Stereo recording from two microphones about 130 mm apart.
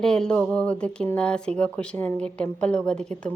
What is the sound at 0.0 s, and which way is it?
Speech, 5° left (ahead or behind).